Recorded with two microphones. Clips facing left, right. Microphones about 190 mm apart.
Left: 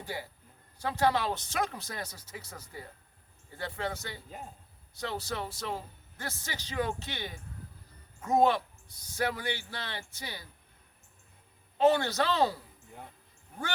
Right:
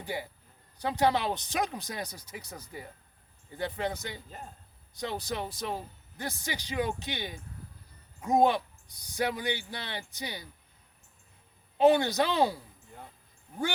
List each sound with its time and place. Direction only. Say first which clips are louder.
0.0 s a man's voice: right 3 dB; 15° right (ahead or behind)
11.8 s speech: right 3 dB; 15° right (ahead or behind)